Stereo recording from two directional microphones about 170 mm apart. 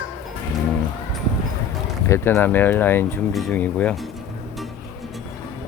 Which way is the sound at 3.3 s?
Centre (ahead or behind).